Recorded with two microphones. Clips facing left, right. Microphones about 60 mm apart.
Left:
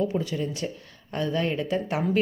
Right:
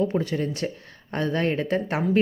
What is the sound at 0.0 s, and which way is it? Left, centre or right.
Speech, right.